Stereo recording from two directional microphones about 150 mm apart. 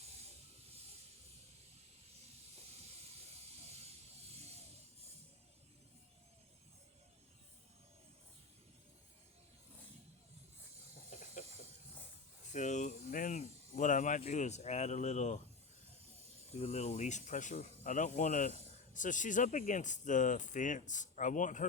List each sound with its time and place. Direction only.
4.4 s music: 45° right (ahead or behind)
12.5 s a sound: 55° left (ahead or behind)
16.6 s speech: 50° left (ahead or behind)